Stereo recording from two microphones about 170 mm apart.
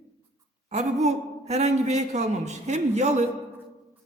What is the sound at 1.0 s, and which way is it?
A man's voice, 40° right (ahead or behind).